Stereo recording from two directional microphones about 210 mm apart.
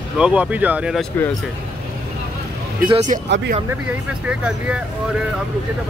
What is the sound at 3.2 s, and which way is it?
Speech, 55° right (ahead or behind).